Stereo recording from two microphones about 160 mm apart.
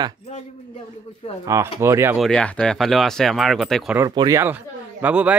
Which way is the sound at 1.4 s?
20° right (ahead or behind).